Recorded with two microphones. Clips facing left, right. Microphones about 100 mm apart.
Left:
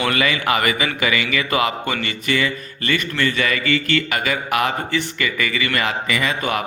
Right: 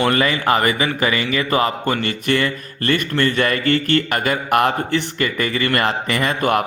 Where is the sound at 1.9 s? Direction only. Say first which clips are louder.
Right 3 dB; 45° right (ahead or behind).